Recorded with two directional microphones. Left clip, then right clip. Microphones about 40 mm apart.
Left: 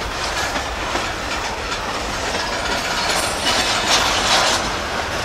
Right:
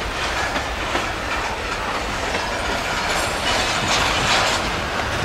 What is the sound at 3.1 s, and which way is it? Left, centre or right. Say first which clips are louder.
Train: left 1 dB; left.